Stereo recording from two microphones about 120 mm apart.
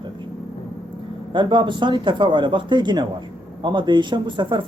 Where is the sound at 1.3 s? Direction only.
40° right (ahead or behind).